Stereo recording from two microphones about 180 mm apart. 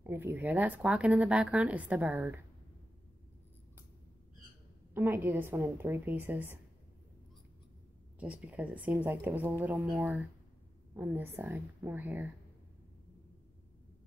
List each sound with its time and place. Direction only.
0.0 s speech: 15° right (ahead or behind)
4.9 s speech: 10° right (ahead or behind)
8.2 s speech: 5° right (ahead or behind)